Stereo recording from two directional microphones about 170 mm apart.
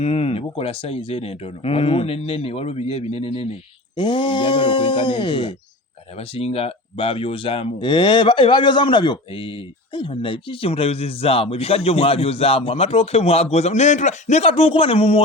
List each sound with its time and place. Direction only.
0.0 s speech: 40° left (ahead or behind)